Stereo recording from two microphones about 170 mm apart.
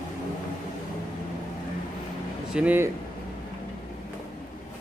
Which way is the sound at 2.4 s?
5° right (ahead or behind).